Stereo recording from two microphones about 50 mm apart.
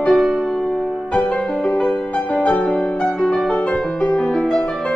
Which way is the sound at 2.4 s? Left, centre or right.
Left.